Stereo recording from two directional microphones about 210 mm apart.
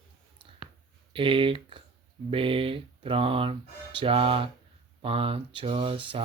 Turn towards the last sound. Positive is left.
turn(degrees=-25)  # may be behind; listen again after turning